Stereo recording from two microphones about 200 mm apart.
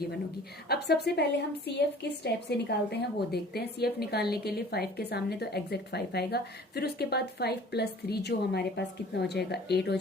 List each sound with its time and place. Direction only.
0.7 s a woman's voice: 55° left (ahead or behind)